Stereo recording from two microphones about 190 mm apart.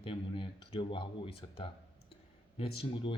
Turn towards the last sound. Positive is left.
turn(degrees=30)  # may be behind; listen again after turning